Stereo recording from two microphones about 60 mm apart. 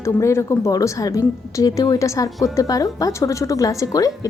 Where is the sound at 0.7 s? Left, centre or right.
Left.